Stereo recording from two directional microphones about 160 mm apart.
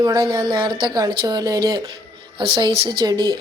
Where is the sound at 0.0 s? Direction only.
20° right (ahead or behind).